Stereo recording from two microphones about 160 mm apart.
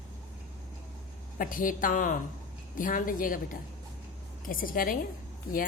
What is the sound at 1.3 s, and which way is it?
A woman's voice, 60° left (ahead or behind).